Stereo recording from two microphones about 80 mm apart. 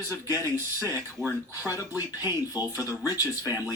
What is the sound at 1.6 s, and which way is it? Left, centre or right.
Speech, right.